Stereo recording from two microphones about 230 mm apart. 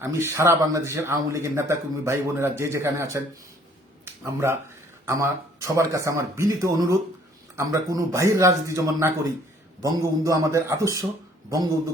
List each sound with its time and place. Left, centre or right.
0.0 s a man's voice: centre
4.0 s a sound: centre
5.0 s a man's voice: centre